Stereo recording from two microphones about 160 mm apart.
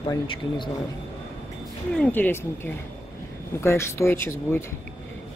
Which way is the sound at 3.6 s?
15° left (ahead or behind).